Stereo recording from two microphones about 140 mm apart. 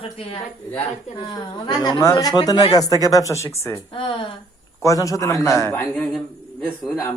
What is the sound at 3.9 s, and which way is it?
Speech, 40° left (ahead or behind).